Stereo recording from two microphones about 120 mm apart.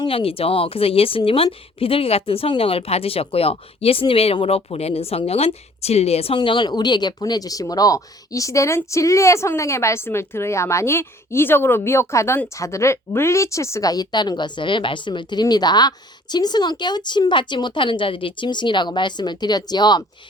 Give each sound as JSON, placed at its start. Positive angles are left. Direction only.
{"t": 0.0, "sound": "speech", "side_deg": 50}